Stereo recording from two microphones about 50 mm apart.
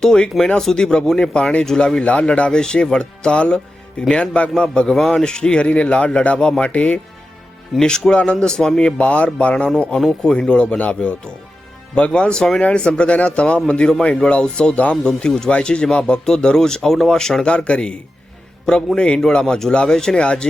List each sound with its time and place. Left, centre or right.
0.0 s speech: centre
2.0 s speech: left
7.8 s speech: centre
9.0 s speech: left
18.9 s speech: left